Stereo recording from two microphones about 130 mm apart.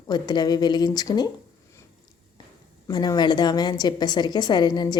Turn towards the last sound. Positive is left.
turn(degrees=35)  # may be behind; listen again after turning